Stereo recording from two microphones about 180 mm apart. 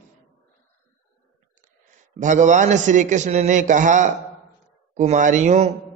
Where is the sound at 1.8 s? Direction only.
45° right (ahead or behind).